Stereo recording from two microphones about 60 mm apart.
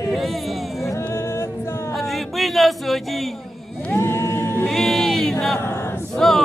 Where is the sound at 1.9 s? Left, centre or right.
Centre.